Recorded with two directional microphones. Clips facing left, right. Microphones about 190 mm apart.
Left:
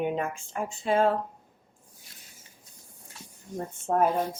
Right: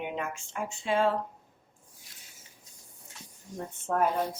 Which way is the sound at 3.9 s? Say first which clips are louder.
Left 3 dB; 30° left (ahead or behind).